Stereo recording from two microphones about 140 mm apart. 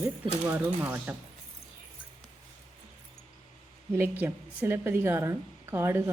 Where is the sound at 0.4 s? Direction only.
15° right (ahead or behind).